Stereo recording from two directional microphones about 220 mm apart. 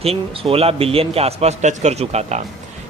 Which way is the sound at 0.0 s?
25° right (ahead or behind).